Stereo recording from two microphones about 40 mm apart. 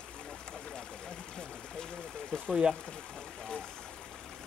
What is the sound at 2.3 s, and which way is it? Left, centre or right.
Speech, centre.